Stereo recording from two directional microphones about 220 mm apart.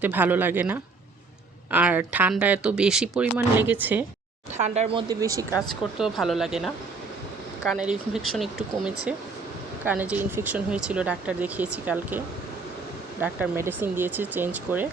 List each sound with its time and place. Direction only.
0.0 s speech: 10° right (ahead or behind)
4.5 s speech: 30° right (ahead or behind); by 5.5 s 15° right (ahead or behind)
5.5 s speech: centre (ahead or behind)